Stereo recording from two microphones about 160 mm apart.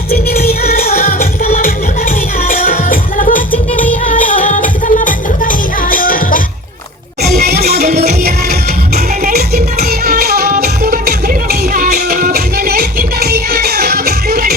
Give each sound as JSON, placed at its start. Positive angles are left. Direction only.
{"t": 0.6, "sound": "music", "side_deg": 70}
{"t": 7.2, "sound": "music", "side_deg": -80}
{"t": 9.2, "sound": "music", "side_deg": -75}